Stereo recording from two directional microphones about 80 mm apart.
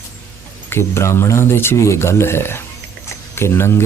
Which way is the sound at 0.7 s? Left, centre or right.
Left.